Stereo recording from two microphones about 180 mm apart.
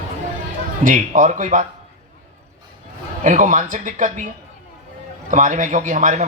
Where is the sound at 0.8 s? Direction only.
45° right (ahead or behind).